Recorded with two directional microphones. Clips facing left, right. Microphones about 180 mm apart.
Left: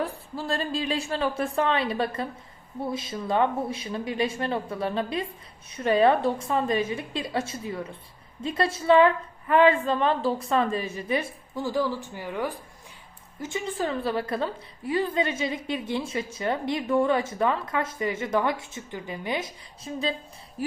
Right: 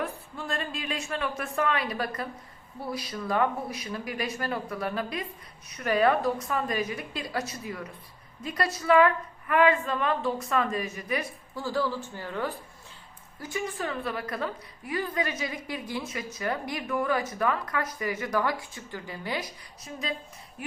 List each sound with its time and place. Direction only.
0.0 s a woman's voice: 35° left (ahead or behind); by 12.5 s 15° left (ahead or behind)
13.4 s a woman's voice: 25° left (ahead or behind)
20.6 s a sound: 35° left (ahead or behind)